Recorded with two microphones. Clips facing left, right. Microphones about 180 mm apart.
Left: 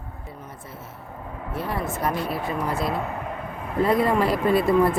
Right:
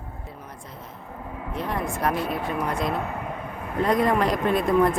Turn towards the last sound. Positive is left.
turn(degrees=5)  # may be behind; listen again after turning